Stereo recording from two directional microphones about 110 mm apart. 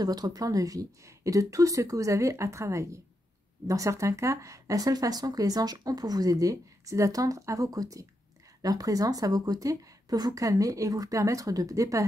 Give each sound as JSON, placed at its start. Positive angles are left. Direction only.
{"t": 0.0, "sound": "speech", "side_deg": -35}